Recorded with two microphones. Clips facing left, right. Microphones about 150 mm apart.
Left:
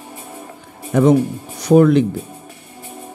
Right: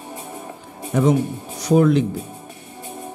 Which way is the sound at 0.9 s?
65° left (ahead or behind).